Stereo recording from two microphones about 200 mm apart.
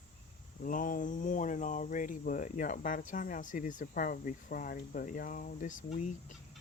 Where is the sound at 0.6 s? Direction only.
45° left (ahead or behind).